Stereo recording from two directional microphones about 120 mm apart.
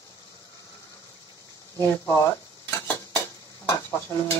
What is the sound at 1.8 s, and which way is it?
Speech, 20° left (ahead or behind).